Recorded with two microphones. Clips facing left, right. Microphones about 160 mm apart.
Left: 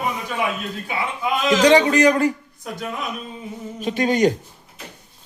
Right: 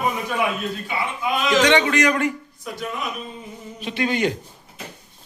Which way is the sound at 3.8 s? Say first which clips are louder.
Left 4 dB; 40° left (ahead or behind).